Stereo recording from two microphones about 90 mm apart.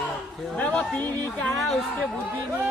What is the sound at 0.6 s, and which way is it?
Speech, 10° left (ahead or behind).